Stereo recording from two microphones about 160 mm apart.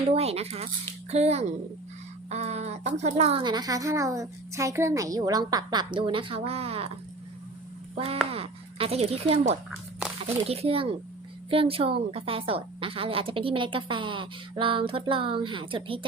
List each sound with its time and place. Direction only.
0.1 s a woman's voice: 40° right (ahead or behind)
3.4 s a woman's voice: 25° right (ahead or behind)
7.9 s a woman's voice: 40° right (ahead or behind)